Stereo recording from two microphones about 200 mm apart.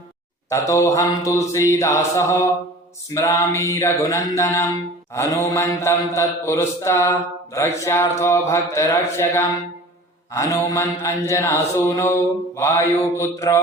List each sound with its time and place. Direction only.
0.5 s mantra: 15° left (ahead or behind)